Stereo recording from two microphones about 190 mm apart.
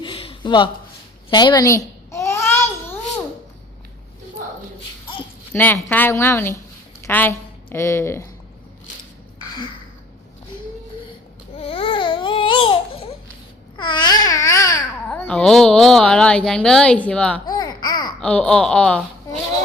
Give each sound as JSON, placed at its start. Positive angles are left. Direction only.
{"t": 0.0, "sound": "a sound", "side_deg": 30}
{"t": 1.3, "sound": "babbling", "side_deg": 25}
{"t": 5.5, "sound": "a woman's voice", "side_deg": 10}
{"t": 11.5, "sound": "babbling", "side_deg": 30}
{"t": 17.4, "sound": "babbling", "side_deg": 20}
{"t": 18.2, "sound": "speech", "side_deg": 5}